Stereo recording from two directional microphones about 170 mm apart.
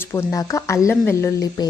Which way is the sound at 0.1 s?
15° left (ahead or behind).